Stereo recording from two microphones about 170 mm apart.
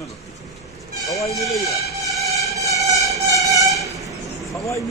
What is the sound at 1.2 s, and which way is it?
Speech, 20° left (ahead or behind).